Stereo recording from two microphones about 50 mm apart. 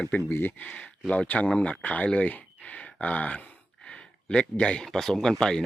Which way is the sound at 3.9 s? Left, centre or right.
Centre.